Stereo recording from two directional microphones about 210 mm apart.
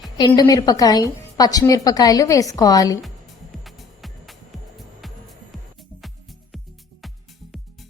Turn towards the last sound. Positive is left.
turn(degrees=0)  # may be behind; listen again after turning